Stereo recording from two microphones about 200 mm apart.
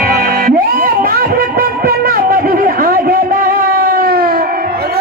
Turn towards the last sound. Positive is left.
turn(degrees=-45)  # may be behind; listen again after turning